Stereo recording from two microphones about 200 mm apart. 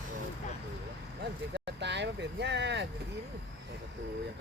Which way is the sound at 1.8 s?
60° right (ahead or behind).